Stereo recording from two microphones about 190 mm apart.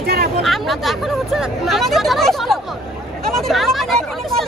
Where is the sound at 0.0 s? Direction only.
55° right (ahead or behind).